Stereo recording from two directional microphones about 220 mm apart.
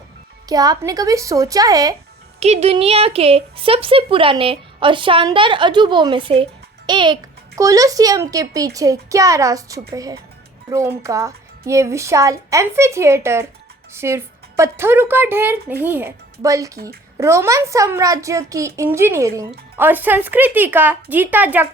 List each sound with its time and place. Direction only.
0.4 s speech: 15° right (ahead or behind)
2.4 s a woman's voice: 30° right (ahead or behind); by 21.7 s 10° right (ahead or behind)